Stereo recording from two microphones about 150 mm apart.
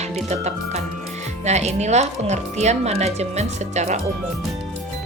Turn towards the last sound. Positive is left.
turn(degrees=-50)  # may be behind; listen again after turning